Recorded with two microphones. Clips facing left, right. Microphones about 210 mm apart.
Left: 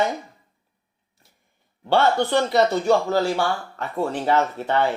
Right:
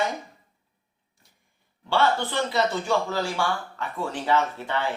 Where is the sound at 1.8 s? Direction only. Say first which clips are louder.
Left 4 dB; 60° left (ahead or behind).